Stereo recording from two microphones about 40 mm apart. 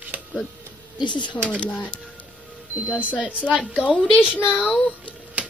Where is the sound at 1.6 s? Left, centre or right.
Left.